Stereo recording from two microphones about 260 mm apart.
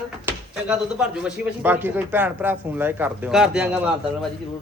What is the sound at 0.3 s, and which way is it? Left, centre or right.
Speech, centre.